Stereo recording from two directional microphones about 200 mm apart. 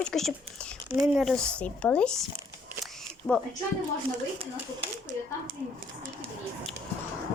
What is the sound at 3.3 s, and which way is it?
Speech, 20° left (ahead or behind).